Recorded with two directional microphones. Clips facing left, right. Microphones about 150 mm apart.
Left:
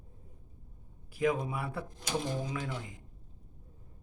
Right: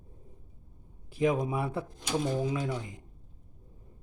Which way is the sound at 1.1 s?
20° right (ahead or behind).